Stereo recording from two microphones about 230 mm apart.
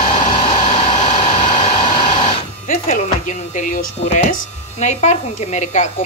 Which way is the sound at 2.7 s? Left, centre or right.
Left.